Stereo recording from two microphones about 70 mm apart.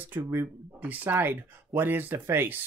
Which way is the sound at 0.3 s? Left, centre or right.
Right.